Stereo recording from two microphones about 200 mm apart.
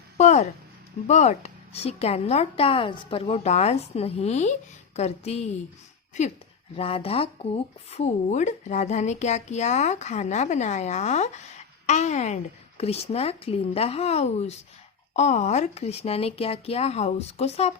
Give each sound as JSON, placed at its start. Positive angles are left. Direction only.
{"t": 0.2, "sound": "speech", "side_deg": 35}
{"t": 6.7, "sound": "speech", "side_deg": 30}